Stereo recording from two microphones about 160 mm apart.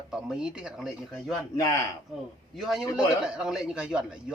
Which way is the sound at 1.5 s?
20° left (ahead or behind).